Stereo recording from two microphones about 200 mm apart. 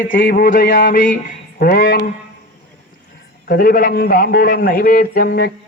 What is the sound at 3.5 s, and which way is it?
A man's voice, 45° left (ahead or behind).